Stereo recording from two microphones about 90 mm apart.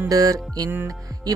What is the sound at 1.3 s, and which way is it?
Music, 45° right (ahead or behind).